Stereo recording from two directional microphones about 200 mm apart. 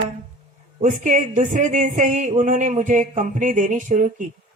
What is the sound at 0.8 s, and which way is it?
Speech, 40° right (ahead or behind).